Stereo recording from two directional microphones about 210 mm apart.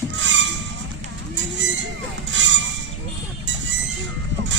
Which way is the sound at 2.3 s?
60° right (ahead or behind).